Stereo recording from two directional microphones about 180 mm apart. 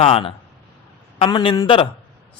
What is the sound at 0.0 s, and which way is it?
A man's voice, 30° left (ahead or behind).